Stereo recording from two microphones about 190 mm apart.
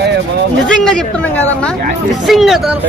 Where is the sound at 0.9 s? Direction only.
5° left (ahead or behind).